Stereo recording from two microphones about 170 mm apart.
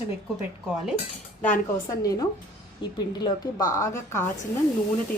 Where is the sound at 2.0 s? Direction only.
20° left (ahead or behind).